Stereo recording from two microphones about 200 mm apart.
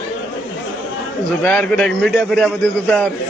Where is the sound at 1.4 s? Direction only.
5° left (ahead or behind).